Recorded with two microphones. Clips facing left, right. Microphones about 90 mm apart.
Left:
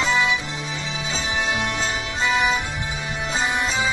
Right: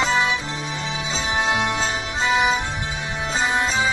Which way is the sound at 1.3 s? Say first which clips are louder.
Right 3 dB; 25° right (ahead or behind).